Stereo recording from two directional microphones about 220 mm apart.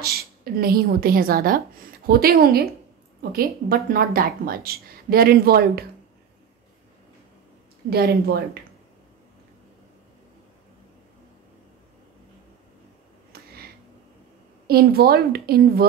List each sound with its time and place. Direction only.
0.0 s a woman's voice: 45° right (ahead or behind)
7.9 s a woman's voice: 45° right (ahead or behind)
13.3 s a sound: 45° right (ahead or behind)
14.7 s a woman's voice: 45° right (ahead or behind)